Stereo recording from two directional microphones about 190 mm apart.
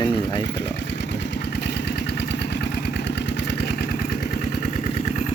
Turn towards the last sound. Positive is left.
turn(degrees=60)  # may be behind; listen again after turning